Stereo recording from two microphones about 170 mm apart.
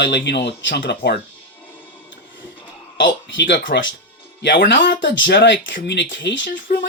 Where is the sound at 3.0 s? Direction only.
90° left.